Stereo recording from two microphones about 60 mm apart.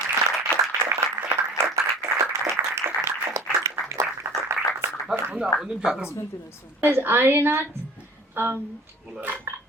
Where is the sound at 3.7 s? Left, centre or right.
Right.